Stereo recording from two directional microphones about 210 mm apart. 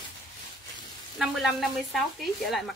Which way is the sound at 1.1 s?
Centre (ahead or behind).